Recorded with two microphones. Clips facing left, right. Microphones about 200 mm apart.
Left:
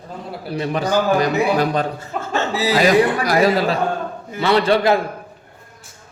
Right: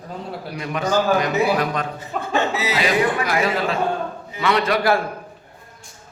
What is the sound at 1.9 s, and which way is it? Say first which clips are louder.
Chuckle: right 1 dB; 15° right (ahead or behind).